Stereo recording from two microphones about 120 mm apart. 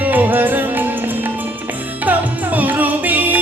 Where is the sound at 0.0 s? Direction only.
15° right (ahead or behind).